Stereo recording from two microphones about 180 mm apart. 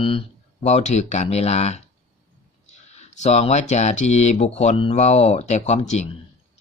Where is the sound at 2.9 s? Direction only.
40° left (ahead or behind).